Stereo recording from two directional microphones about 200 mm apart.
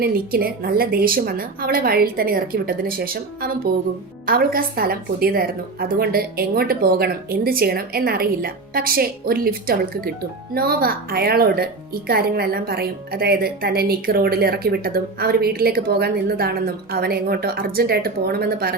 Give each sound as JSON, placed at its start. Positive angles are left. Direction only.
{"t": 0.0, "sound": "speech", "side_deg": -50}